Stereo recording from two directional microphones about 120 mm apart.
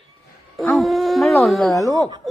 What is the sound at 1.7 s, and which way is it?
Speech, 30° left (ahead or behind).